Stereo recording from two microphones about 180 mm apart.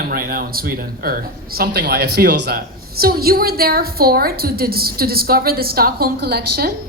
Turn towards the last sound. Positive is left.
turn(degrees=-60)  # may be behind; listen again after turning